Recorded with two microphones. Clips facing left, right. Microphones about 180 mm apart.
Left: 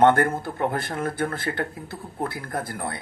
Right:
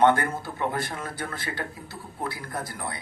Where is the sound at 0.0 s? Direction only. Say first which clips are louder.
Left 3 dB; 50° left (ahead or behind).